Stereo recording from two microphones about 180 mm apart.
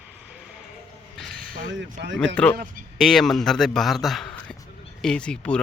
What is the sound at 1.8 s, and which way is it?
Speech, 80° right.